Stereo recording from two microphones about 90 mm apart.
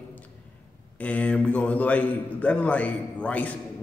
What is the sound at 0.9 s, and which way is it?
A man's voice, 15° left (ahead or behind).